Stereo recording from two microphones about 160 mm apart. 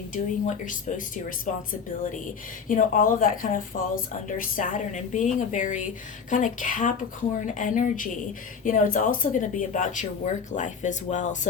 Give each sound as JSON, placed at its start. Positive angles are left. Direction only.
{"t": 0.1, "sound": "speech", "side_deg": 50}
{"t": 2.6, "sound": "speech", "side_deg": 55}